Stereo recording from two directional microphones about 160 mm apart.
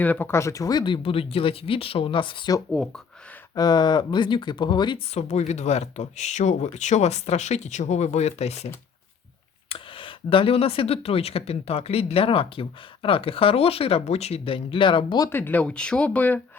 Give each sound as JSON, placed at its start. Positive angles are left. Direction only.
{"t": 0.0, "sound": "speech", "side_deg": 10}
{"t": 2.7, "sound": "speech", "side_deg": 5}
{"t": 3.5, "sound": "speech", "side_deg": 25}
{"t": 5.1, "sound": "speech", "side_deg": 45}
{"t": 15.3, "sound": "speech", "side_deg": 15}